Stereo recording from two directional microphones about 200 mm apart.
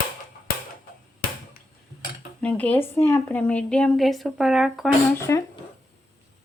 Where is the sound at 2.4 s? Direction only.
5° left (ahead or behind).